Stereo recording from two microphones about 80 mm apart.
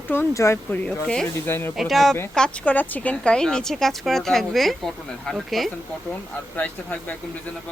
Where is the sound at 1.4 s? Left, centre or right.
Left.